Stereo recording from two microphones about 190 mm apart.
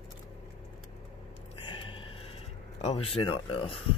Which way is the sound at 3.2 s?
25° left (ahead or behind).